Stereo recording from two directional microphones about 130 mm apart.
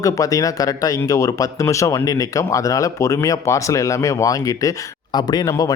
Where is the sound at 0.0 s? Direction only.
25° left (ahead or behind).